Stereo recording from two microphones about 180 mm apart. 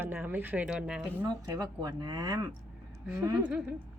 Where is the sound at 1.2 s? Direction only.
20° right (ahead or behind).